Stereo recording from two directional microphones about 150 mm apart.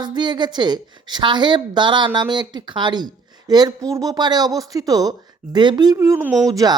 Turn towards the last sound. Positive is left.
turn(degrees=-25)  # may be behind; listen again after turning